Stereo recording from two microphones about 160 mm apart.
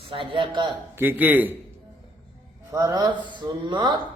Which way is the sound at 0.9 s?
10° right (ahead or behind).